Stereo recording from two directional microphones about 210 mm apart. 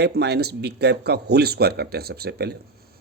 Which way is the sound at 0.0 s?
50° right (ahead or behind).